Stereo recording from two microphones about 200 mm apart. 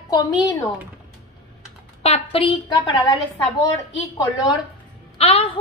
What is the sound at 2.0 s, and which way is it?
A woman's voice, 30° left (ahead or behind).